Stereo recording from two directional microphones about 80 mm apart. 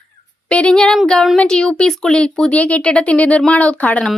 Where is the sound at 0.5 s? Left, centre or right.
Centre.